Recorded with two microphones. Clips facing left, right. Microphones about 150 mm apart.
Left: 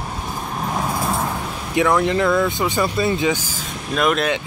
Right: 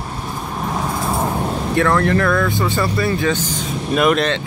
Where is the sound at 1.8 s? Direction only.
15° left (ahead or behind).